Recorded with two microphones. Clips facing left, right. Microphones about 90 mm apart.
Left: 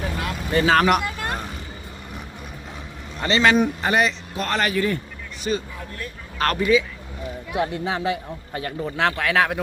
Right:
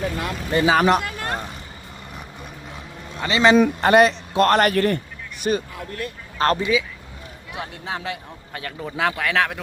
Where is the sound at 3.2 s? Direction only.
10° right (ahead or behind).